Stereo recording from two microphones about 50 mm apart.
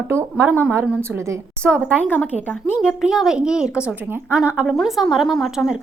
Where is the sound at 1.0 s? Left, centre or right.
Right.